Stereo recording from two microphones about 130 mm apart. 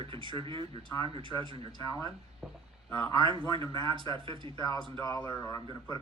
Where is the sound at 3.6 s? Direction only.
25° left (ahead or behind).